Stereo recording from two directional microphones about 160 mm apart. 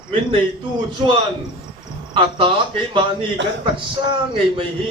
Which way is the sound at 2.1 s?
30° right (ahead or behind).